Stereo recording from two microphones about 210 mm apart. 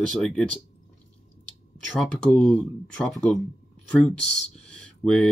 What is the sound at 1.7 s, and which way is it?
Speech, 5° left (ahead or behind).